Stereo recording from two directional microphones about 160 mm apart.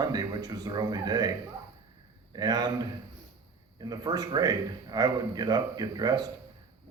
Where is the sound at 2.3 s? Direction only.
25° right (ahead or behind).